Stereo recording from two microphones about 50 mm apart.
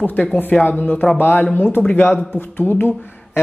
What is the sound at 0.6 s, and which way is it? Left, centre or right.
A man's voice, left.